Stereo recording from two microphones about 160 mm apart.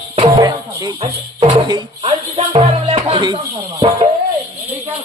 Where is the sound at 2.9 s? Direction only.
30° right (ahead or behind).